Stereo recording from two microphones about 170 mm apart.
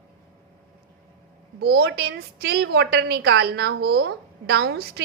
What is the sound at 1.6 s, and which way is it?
A woman's voice, 70° right (ahead or behind).